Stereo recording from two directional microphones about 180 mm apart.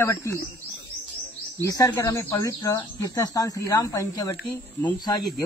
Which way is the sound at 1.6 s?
20° left (ahead or behind).